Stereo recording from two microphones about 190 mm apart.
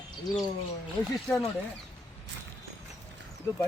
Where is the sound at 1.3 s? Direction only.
5° left (ahead or behind).